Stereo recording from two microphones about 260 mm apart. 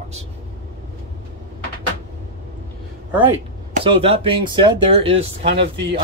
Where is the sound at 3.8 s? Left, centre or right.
Right.